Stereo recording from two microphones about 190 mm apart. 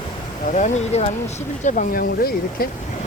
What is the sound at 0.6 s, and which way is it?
Speech, 35° left (ahead or behind).